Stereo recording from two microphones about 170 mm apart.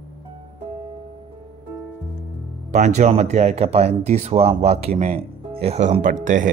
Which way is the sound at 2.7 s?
45° right (ahead or behind).